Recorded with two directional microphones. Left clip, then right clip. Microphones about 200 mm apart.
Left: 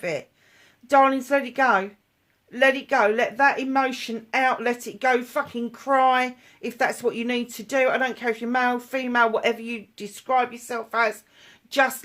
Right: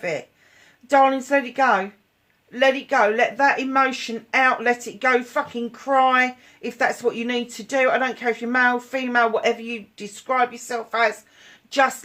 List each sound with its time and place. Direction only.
0.9 s speech: 40° left (ahead or behind)